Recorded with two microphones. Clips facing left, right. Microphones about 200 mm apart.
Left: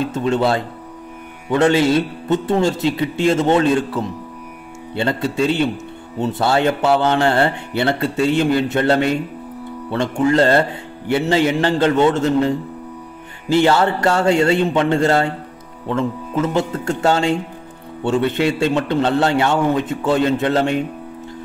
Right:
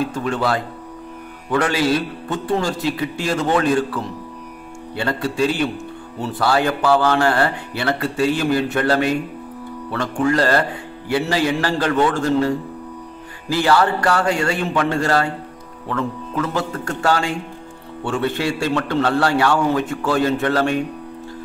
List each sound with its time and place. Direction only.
0.0 s speech: 25° left (ahead or behind)